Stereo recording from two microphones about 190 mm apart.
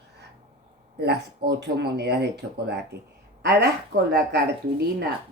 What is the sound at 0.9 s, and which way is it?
Speech, 60° right (ahead or behind).